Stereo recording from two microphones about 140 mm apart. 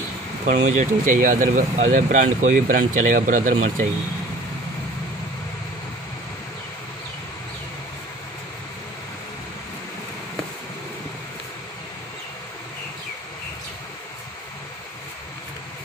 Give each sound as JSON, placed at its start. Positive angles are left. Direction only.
{"t": 0.5, "sound": "speech", "side_deg": -60}